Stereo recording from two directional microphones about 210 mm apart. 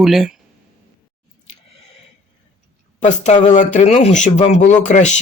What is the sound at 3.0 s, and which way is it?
Speech, 35° left (ahead or behind).